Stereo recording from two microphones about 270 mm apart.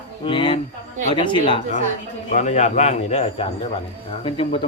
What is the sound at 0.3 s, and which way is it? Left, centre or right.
Speech, centre.